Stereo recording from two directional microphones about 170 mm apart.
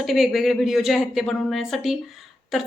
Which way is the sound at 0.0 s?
Centre (ahead or behind).